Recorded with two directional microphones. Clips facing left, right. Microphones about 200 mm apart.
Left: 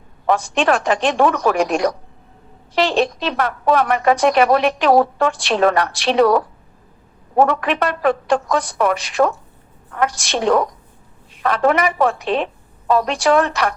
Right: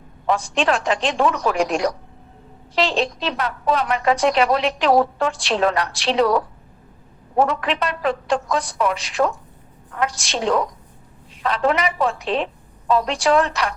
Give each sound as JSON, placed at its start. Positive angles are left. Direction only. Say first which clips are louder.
{"t": 0.3, "sound": "a woman's voice", "louder": "left 3 dB", "side_deg": 60}